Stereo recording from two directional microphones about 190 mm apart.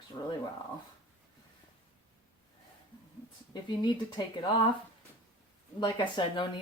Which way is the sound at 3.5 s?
25° left (ahead or behind).